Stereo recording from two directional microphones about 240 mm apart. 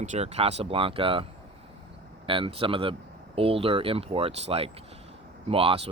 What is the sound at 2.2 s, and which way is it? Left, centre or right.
Speech, right.